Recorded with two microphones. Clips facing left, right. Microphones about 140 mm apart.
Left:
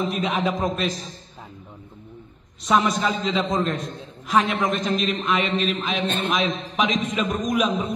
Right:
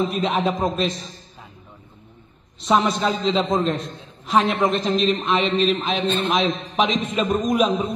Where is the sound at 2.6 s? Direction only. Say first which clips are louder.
Right 1 dB; centre (ahead or behind).